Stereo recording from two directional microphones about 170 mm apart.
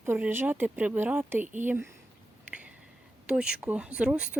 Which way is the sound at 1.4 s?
45° right (ahead or behind).